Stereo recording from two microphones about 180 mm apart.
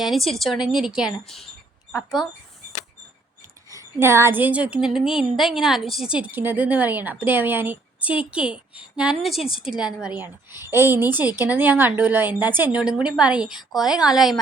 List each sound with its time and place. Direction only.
0.0 s a woman's voice: centre (ahead or behind)
2.2 s speech: 25° left (ahead or behind)
3.8 s a woman's voice: 15° right (ahead or behind)